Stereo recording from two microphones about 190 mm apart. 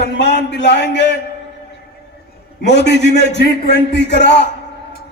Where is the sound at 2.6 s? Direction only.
65° left (ahead or behind).